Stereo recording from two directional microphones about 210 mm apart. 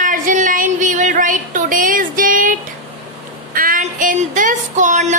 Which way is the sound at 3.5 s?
40° right (ahead or behind).